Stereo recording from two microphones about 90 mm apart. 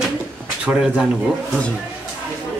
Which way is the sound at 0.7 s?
10° right (ahead or behind).